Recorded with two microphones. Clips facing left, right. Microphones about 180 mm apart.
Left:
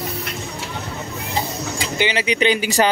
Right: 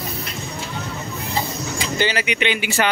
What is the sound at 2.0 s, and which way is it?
Speech, 20° left (ahead or behind).